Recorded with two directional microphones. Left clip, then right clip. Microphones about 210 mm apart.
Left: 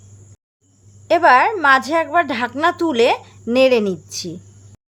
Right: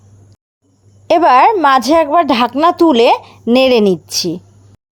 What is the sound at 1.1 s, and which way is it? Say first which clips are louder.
A woman's voice: right 4 dB; 30° right (ahead or behind).